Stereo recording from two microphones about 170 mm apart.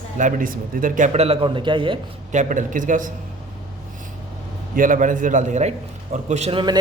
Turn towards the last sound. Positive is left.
turn(degrees=-40)  # may be behind; listen again after turning